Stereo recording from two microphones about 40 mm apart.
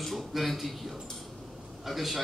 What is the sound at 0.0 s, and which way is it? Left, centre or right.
A man's voice, centre.